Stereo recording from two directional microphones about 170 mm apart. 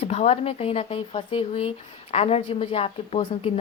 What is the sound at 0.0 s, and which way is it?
A woman's voice, 40° left (ahead or behind).